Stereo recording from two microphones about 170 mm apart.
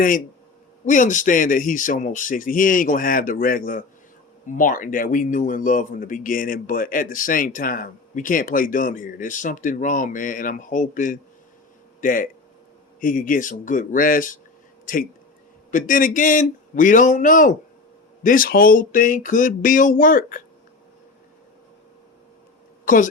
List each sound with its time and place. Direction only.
0.9 s a man's voice: 50° left (ahead or behind)
15.7 s a man's voice: 55° left (ahead or behind)